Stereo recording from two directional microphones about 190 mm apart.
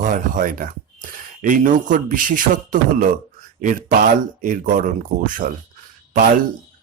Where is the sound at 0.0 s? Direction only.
45° right (ahead or behind).